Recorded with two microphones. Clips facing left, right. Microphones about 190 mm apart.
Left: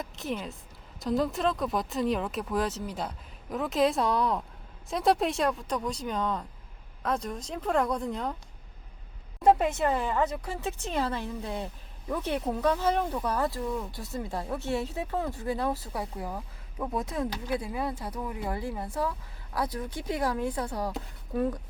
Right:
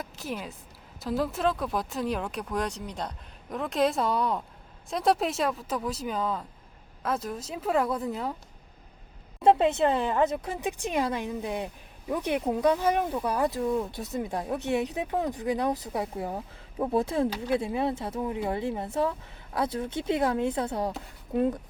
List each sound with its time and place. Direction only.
0.0 s a woman's voice: centre (ahead or behind)
9.4 s speech: 25° right (ahead or behind)